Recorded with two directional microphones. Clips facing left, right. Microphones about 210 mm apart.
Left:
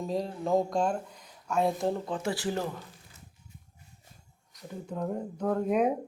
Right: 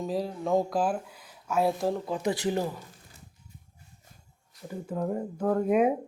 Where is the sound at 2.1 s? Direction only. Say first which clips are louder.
Right 3 dB; 20° right (ahead or behind).